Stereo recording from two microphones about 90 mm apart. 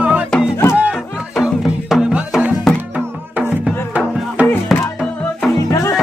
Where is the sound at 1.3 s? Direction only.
5° right (ahead or behind).